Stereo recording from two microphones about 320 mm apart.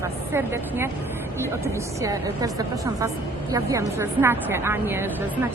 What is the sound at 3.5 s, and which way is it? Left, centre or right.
A woman's voice, centre.